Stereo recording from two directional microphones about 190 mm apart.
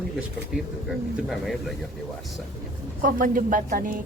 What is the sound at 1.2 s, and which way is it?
Speech, centre (ahead or behind).